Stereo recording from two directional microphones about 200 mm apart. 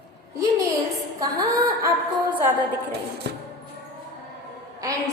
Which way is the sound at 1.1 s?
15° right (ahead or behind).